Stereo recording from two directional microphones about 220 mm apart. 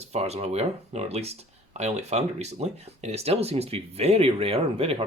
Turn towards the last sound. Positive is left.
turn(degrees=-25)  # may be behind; listen again after turning